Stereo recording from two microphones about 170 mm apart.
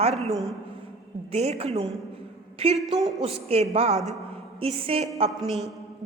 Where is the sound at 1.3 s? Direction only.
35° right (ahead or behind).